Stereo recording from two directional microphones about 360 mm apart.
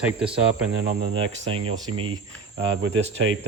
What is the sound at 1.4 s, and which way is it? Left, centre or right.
Speech, centre.